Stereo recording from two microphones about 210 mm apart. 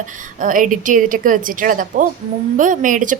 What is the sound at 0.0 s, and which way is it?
A woman's voice, 40° right (ahead or behind).